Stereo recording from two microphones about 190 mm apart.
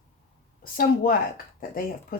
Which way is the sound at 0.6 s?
50° left (ahead or behind).